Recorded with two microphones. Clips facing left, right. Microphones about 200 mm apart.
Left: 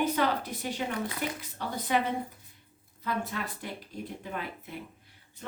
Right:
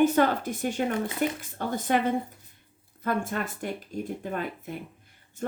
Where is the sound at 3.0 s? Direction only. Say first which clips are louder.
Right 5 dB; 50° right (ahead or behind).